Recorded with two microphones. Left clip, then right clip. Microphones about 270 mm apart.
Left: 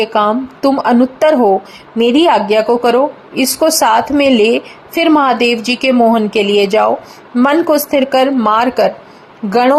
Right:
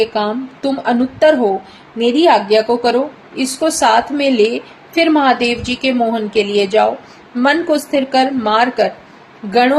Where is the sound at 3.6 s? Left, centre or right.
Left.